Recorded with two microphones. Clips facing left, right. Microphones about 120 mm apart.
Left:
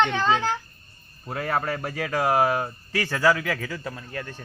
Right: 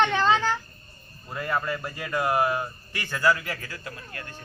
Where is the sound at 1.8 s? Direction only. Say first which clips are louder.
Left 3 dB; 85° left.